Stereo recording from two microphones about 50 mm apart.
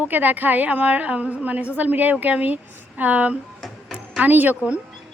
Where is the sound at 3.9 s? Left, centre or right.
Right.